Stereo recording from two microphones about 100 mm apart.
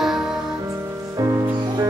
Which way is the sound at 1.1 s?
35° right (ahead or behind).